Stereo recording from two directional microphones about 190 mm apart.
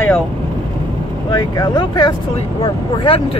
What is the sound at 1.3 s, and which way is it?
Speech, 20° left (ahead or behind).